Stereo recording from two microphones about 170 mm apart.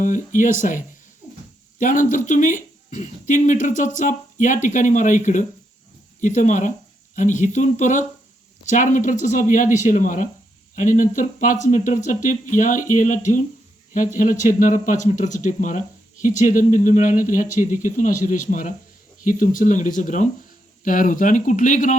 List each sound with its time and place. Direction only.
0.0 s speech: 50° left (ahead or behind)